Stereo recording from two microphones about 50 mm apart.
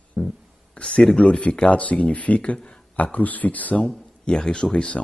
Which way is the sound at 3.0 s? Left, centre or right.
Left.